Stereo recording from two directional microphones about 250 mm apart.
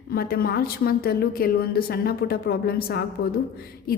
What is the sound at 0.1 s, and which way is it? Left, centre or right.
A woman's voice, left.